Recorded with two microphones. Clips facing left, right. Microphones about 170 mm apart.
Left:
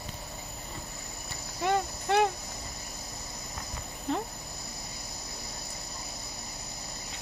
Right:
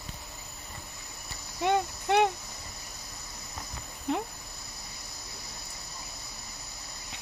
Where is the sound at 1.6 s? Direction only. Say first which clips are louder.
Right 1 dB; 20° right (ahead or behind).